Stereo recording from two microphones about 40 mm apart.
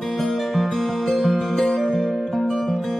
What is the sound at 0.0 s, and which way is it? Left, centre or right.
Music, centre.